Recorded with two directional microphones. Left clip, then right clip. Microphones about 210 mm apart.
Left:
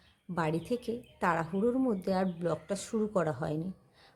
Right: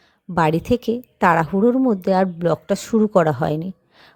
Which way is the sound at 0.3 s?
45° right (ahead or behind).